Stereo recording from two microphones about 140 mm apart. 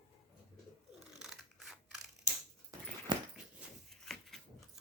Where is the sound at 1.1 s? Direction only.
5° right (ahead or behind).